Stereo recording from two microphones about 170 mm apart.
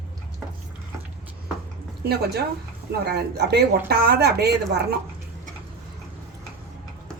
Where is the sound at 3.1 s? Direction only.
70° right (ahead or behind).